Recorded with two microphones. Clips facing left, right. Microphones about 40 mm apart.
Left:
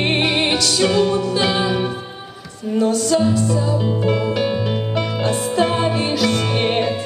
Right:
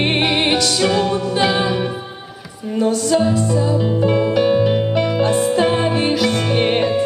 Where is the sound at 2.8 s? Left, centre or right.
Right.